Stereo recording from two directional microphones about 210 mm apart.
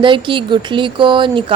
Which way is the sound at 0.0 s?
25° right (ahead or behind).